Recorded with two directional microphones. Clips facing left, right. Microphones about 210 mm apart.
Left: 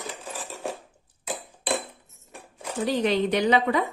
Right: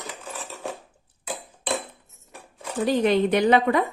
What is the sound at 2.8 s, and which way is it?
Speech, 50° right (ahead or behind).